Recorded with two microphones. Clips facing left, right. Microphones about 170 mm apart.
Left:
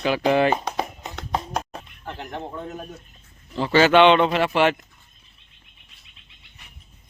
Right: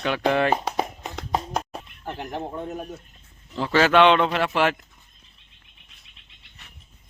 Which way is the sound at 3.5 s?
Centre (ahead or behind).